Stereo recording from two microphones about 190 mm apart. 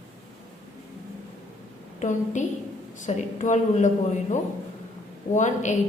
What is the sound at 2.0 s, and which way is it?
A woman's voice, 40° left (ahead or behind).